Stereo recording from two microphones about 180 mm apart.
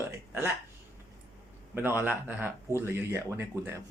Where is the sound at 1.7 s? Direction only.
10° right (ahead or behind).